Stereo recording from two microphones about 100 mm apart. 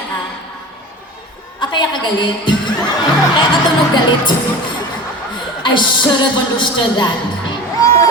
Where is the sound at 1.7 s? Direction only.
50° left (ahead or behind).